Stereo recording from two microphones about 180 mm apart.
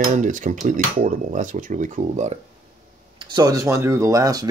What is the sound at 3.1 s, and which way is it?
Speech, 20° right (ahead or behind).